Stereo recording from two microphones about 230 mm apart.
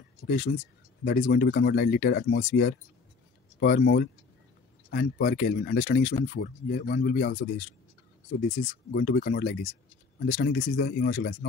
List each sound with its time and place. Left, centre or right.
0.3 s speech: left